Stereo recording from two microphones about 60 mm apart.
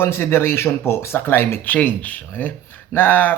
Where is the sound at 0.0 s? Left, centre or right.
Left.